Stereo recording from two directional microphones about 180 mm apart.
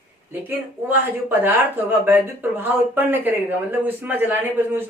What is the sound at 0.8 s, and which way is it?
Speech, 10° right (ahead or behind).